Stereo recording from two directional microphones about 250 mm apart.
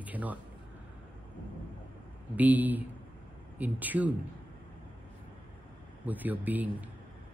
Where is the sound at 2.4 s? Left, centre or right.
Centre.